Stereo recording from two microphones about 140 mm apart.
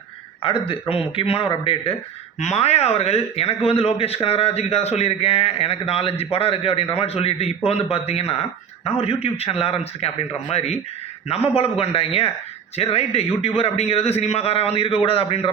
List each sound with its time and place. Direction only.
0.7 s speech: 40° left (ahead or behind)